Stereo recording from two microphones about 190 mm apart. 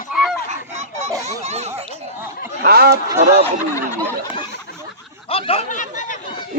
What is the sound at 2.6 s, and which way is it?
Speech, 55° right (ahead or behind).